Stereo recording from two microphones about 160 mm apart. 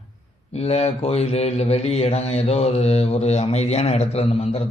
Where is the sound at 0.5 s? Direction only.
40° left (ahead or behind).